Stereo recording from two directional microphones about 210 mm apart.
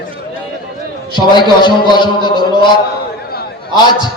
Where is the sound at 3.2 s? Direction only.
50° left (ahead or behind).